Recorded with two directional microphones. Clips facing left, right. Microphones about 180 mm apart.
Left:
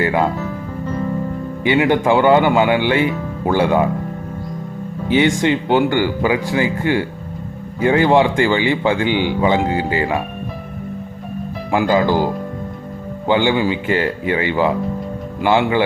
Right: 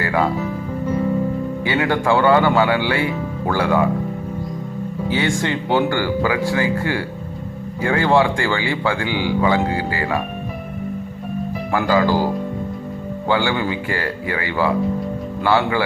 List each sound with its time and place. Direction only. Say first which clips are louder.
0.0 s music: left 3 dB; 20° left (ahead or behind)
1.6 s speech: left 5 dB; 20° left (ahead or behind)
5.0 s speech: left 6 dB; 20° left (ahead or behind)
11.7 s speech: left 2 dB; 20° left (ahead or behind)